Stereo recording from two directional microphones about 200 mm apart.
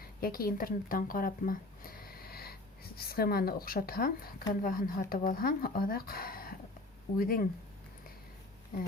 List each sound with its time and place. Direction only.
0.2 s speech: 45° left (ahead or behind)